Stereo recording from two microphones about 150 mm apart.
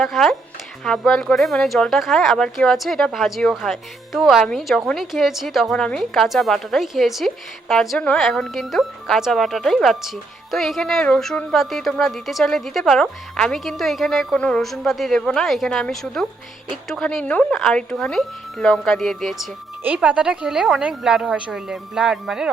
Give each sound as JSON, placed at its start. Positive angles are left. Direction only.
{"t": 0.0, "sound": "speech", "side_deg": 0}